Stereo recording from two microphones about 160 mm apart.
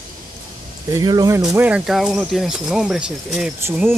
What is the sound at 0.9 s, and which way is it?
Speech, 25° right (ahead or behind).